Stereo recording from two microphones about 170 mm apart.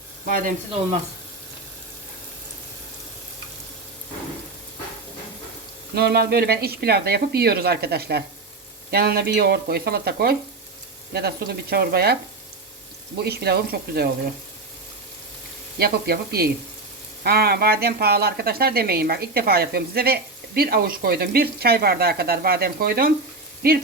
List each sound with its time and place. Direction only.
0.3 s speech: 55° right (ahead or behind)
5.9 s speech: 70° right (ahead or behind)
13.2 s speech: 70° right (ahead or behind)
15.8 s speech: 65° right (ahead or behind)